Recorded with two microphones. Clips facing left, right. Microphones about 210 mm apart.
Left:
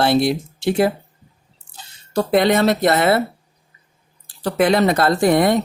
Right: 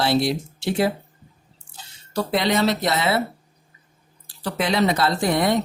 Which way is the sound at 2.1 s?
55° left (ahead or behind).